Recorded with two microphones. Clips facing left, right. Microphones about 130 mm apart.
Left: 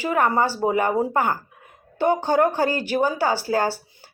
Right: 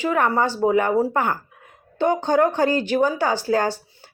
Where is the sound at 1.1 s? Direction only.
40° left (ahead or behind).